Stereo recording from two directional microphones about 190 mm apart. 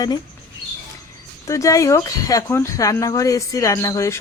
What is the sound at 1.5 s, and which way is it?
Speech, 15° left (ahead or behind).